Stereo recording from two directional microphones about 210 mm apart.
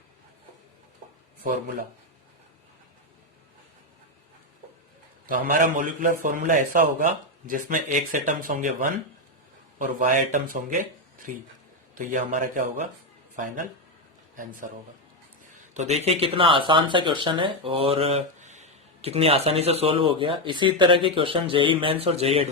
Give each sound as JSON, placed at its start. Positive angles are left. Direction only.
{"t": 5.2, "sound": "a man's voice", "side_deg": -40}